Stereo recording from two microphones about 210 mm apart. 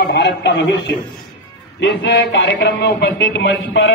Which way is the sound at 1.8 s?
60° left (ahead or behind).